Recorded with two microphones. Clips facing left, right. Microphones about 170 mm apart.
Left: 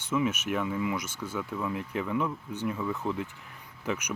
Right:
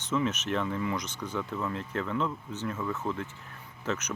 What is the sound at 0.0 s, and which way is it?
Speech, 10° left (ahead or behind).